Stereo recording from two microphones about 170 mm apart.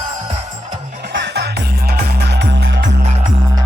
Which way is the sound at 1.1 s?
80° right.